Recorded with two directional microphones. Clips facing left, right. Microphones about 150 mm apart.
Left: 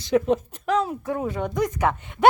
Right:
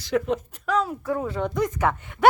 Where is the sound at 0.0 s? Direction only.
20° left (ahead or behind).